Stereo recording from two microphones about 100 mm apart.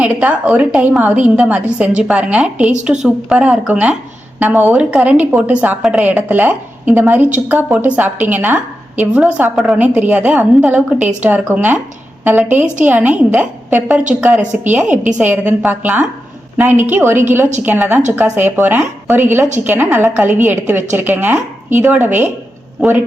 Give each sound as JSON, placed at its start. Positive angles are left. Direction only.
{"t": 0.0, "sound": "a woman's voice", "side_deg": -10}